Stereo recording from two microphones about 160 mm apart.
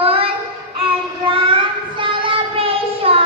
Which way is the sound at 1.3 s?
30° right (ahead or behind).